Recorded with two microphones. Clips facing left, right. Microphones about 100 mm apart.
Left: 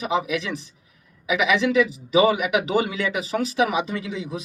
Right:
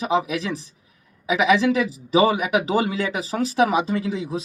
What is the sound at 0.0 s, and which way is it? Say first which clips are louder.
Speech: right 2 dB; 35° right (ahead or behind).